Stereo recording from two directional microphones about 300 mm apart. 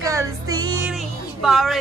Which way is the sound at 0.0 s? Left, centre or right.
Centre.